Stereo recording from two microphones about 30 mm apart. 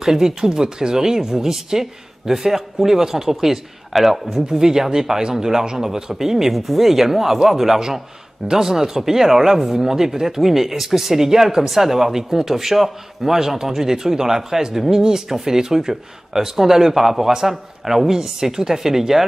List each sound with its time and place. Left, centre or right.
0.0 s speech: centre
4.3 s speech: centre